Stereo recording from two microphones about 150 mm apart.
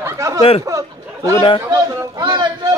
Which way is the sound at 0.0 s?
20° right (ahead or behind).